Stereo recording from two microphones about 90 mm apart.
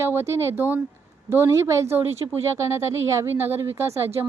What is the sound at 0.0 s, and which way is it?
A woman's voice, 30° right (ahead or behind).